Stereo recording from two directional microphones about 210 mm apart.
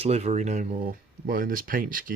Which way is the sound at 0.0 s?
30° right (ahead or behind).